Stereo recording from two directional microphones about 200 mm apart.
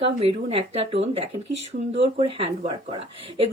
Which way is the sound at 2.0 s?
30° right (ahead or behind).